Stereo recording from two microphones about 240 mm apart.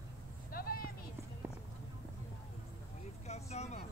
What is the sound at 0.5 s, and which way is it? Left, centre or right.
Clip-clop, left.